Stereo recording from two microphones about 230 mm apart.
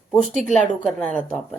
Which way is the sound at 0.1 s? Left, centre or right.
Centre.